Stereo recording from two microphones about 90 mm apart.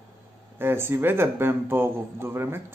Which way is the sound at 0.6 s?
25° right (ahead or behind).